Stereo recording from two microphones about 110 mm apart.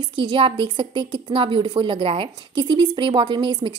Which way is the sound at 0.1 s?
50° right (ahead or behind).